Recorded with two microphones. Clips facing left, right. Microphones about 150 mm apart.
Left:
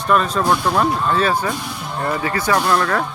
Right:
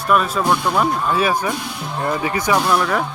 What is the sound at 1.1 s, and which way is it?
Speech, 10° right (ahead or behind).